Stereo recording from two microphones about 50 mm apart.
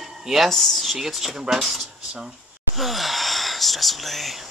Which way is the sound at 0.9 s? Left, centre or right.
Centre.